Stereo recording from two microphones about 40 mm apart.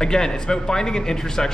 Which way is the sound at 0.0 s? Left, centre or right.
Centre.